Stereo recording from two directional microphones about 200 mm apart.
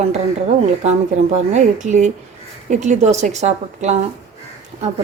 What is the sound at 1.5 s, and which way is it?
A woman's voice, 40° right (ahead or behind).